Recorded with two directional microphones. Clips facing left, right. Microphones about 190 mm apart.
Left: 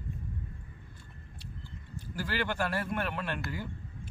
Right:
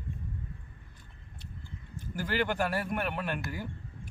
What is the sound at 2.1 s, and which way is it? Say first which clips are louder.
Speech: right 3 dB; 15° right (ahead or behind).